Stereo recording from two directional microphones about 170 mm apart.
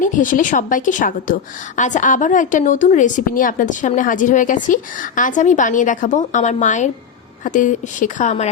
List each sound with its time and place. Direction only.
0.0 s a woman's voice: 50° left (ahead or behind)